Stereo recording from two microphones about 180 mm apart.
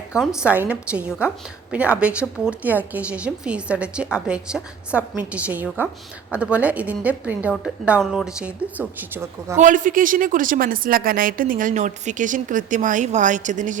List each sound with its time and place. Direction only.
0.2 s a woman's voice: 5° right (ahead or behind)
9.6 s speech: 45° right (ahead or behind)